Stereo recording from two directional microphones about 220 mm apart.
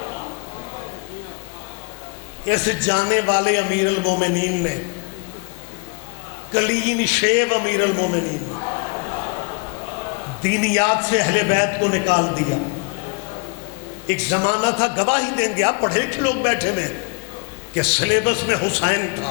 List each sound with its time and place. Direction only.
2.5 s a man's voice: 10° left (ahead or behind)
6.5 s a man's voice: 10° left (ahead or behind)
14.1 s a man's voice: 15° left (ahead or behind)